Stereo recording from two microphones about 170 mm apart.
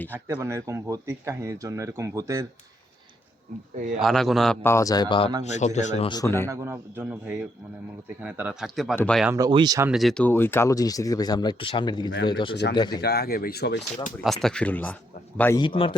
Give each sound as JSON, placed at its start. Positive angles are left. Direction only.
{"t": 0.1, "sound": "speech", "side_deg": -15}
{"t": 3.9, "sound": "speech", "side_deg": 0}
{"t": 4.6, "sound": "speech", "side_deg": 15}
{"t": 5.5, "sound": "a man's voice", "side_deg": 45}
{"t": 6.1, "sound": "speech", "side_deg": 20}
{"t": 6.5, "sound": "speech", "side_deg": -15}
{"t": 9.2, "sound": "speech", "side_deg": -15}
{"t": 9.8, "sound": "speech", "side_deg": 0}
{"t": 13.0, "sound": "speech", "side_deg": 65}
{"t": 14.3, "sound": "speech", "side_deg": 0}
{"t": 15.5, "sound": "speech", "side_deg": 30}